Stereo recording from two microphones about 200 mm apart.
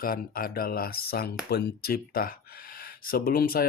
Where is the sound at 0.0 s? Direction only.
45° left (ahead or behind).